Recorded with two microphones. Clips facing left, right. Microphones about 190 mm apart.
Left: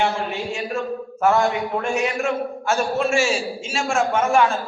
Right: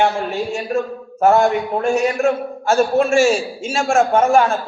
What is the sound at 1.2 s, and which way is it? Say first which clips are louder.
A man's voice: right 5 dB; 40° right (ahead or behind).